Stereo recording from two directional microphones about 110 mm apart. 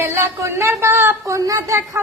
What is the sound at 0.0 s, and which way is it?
Speech, 20° right (ahead or behind).